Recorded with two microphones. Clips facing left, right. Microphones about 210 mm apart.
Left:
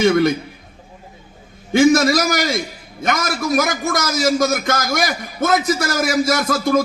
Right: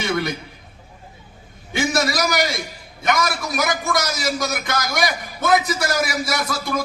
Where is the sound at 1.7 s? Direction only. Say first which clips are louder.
Left 9 dB; 45° left (ahead or behind).